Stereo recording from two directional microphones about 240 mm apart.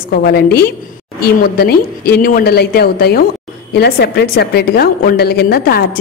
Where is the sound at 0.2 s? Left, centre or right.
Left.